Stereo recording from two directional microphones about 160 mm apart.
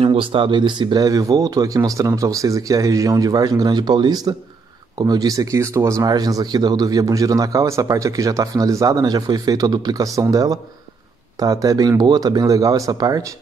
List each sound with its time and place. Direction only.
0.0 s speech: 35° right (ahead or behind)